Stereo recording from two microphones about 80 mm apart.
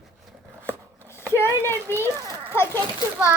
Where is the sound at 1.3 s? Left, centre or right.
Left.